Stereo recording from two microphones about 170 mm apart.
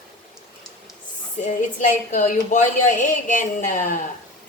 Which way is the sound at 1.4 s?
45° left (ahead or behind).